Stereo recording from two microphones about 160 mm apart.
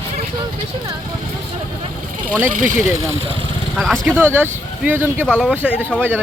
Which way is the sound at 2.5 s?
55° right (ahead or behind).